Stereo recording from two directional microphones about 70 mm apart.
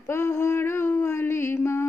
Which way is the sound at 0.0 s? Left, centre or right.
Left.